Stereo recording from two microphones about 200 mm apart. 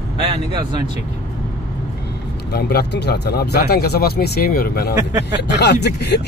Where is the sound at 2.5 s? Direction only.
55° left (ahead or behind).